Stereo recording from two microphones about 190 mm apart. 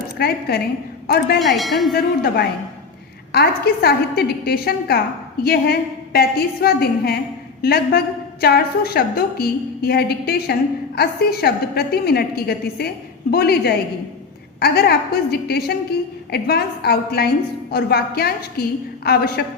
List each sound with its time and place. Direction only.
0.2 s a woman's voice: 55° left (ahead or behind)
1.4 s speech: centre (ahead or behind)
2.0 s a woman's voice: 55° left (ahead or behind)